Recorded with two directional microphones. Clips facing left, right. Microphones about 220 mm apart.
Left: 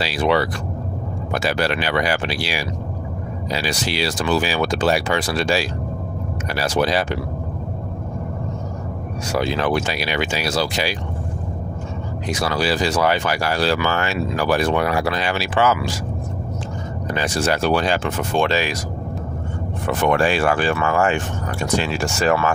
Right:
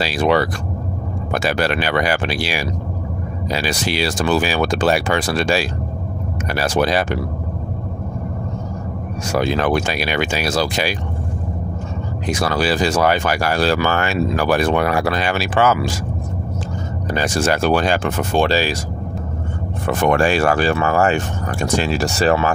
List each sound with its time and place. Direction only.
0.0 s speech: 45° right (ahead or behind)
9.3 s speech: 50° right (ahead or behind)
12.3 s speech: 50° right (ahead or behind)
17.1 s speech: 45° right (ahead or behind)
19.9 s speech: 45° right (ahead or behind)